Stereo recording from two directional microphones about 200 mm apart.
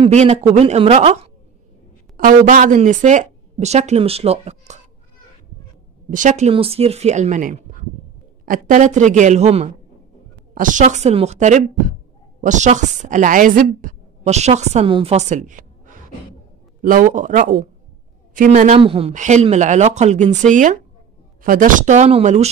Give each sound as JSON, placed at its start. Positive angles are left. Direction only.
{"t": 0.0, "sound": "speech", "side_deg": -35}
{"t": 2.1, "sound": "speech", "side_deg": -40}
{"t": 6.0, "sound": "a woman's voice", "side_deg": -40}